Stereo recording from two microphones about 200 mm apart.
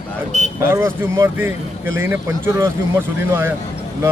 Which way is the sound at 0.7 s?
15° right (ahead or behind).